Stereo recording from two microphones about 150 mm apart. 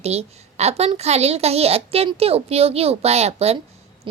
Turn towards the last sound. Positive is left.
turn(degrees=-45)  # may be behind; listen again after turning